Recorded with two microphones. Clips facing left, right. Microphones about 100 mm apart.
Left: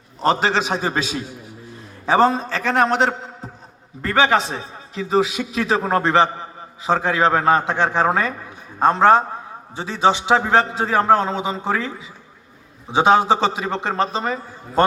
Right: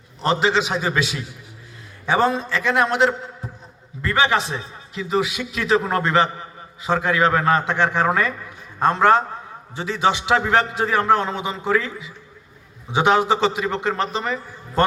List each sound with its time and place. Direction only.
0.3 s a man's voice: 40° left (ahead or behind); by 14.8 s 25° left (ahead or behind)